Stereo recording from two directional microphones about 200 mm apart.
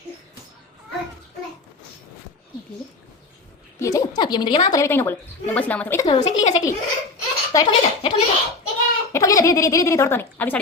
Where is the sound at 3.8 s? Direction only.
15° left (ahead or behind).